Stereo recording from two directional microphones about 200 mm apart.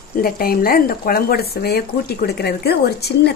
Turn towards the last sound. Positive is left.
turn(degrees=55)  # may be behind; listen again after turning